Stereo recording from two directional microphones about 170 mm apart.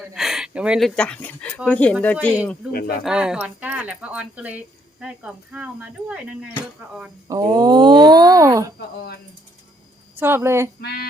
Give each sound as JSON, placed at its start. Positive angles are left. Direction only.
{"t": 0.0, "sound": "speech", "side_deg": 0}
{"t": 2.7, "sound": "speech", "side_deg": 60}
{"t": 3.0, "sound": "speech", "side_deg": -5}
{"t": 7.3, "sound": "speech", "side_deg": -25}
{"t": 10.2, "sound": "speech", "side_deg": -15}
{"t": 10.8, "sound": "female singing", "side_deg": 75}